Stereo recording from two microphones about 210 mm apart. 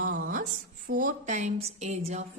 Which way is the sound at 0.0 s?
40° right (ahead or behind).